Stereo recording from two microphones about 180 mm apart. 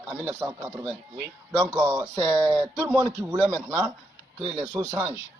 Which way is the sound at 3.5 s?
20° right (ahead or behind).